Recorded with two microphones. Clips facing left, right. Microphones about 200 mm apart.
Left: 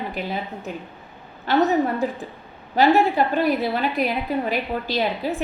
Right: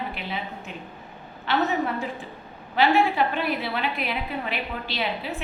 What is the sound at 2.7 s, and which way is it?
A woman's voice, 40° left (ahead or behind).